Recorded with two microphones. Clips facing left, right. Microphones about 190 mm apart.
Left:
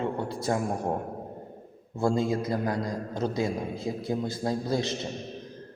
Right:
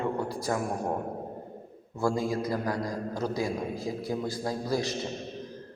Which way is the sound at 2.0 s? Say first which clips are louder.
Left 2 dB; 25° left (ahead or behind).